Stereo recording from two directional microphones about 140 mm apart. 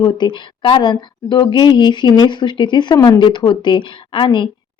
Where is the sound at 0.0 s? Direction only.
35° left (ahead or behind).